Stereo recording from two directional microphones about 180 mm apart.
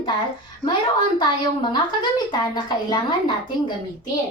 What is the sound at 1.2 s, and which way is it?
A woman's voice, 25° left (ahead or behind).